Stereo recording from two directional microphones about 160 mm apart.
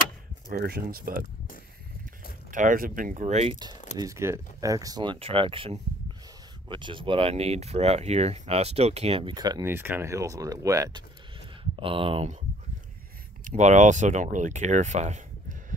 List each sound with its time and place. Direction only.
0.5 s speech: 75° right (ahead or behind)
2.5 s speech: 55° right (ahead or behind)
4.0 s speech: 20° right (ahead or behind); by 12.3 s 35° right (ahead or behind)
13.4 s speech: 50° right (ahead or behind)